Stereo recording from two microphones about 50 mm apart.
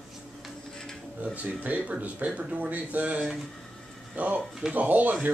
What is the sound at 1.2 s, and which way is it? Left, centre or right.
Speech, right.